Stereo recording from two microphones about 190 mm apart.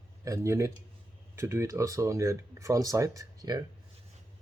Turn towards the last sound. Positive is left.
turn(degrees=-20)  # may be behind; listen again after turning